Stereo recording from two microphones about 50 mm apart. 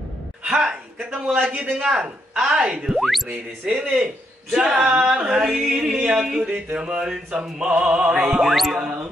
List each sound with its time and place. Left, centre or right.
0.5 s music: centre
1.1 s speech: centre
8.3 s music: centre